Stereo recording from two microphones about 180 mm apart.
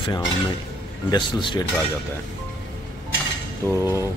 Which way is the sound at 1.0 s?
25° left (ahead or behind).